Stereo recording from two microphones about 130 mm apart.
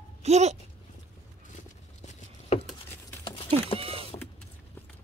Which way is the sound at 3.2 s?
40° left (ahead or behind).